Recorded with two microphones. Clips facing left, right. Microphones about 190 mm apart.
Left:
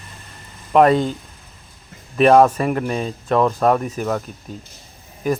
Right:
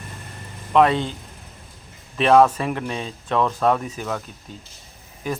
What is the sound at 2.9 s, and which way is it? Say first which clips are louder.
Speech: left 6 dB; 45° left (ahead or behind).